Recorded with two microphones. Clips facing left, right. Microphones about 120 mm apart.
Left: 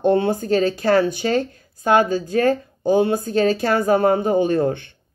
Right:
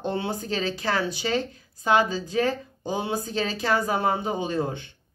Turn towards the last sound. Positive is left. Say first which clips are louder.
# left 9 dB
turn(degrees=60)  # may be behind; listen again after turning